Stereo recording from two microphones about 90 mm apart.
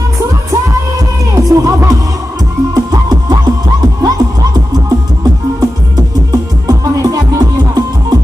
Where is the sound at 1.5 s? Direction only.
40° right (ahead or behind).